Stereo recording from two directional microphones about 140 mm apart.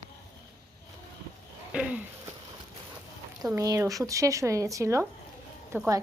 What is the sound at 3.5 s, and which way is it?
A woman's voice, 25° right (ahead or behind).